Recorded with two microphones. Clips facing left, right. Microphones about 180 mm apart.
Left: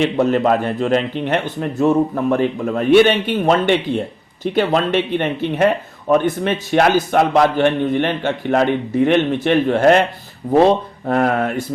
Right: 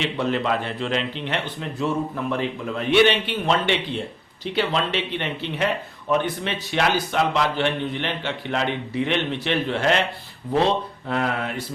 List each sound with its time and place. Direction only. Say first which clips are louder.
0.0 s speech: left 8 dB; 45° left (ahead or behind)